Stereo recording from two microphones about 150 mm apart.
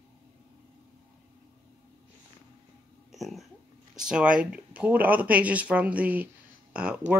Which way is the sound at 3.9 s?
5° right (ahead or behind).